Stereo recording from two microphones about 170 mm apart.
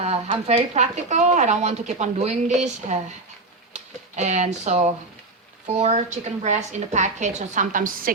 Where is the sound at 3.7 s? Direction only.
45° right (ahead or behind).